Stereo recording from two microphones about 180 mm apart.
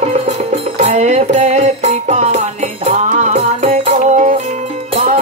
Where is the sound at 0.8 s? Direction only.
35° right (ahead or behind).